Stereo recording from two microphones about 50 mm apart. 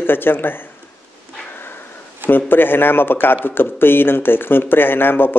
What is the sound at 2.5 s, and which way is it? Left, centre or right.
Speech, left.